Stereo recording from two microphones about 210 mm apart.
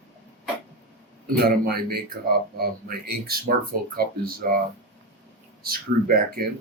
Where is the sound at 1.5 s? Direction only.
45° right (ahead or behind).